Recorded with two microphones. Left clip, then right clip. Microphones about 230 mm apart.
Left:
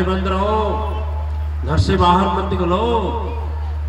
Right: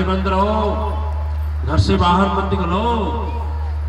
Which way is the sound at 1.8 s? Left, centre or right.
Left.